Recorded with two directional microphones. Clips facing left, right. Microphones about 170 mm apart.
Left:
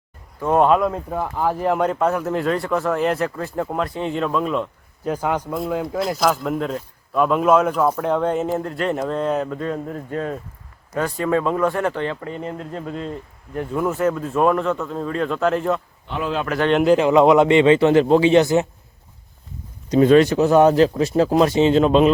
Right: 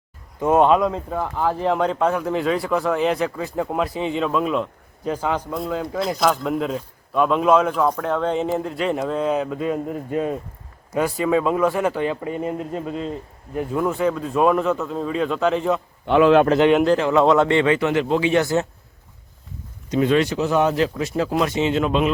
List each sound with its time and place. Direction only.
0.5 s speech: centre (ahead or behind)
5.1 s speech: 10° left (ahead or behind)
8.5 s speech: centre (ahead or behind)
16.0 s a man's voice: 75° right (ahead or behind)
16.8 s speech: 15° left (ahead or behind)
17.7 s speech: 30° left (ahead or behind)
19.9 s speech: 40° left (ahead or behind)